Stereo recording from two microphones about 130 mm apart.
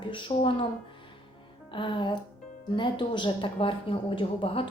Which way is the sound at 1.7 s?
40° left (ahead or behind).